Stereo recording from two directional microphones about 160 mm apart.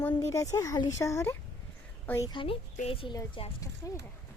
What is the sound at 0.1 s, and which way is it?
A woman's voice, 20° left (ahead or behind).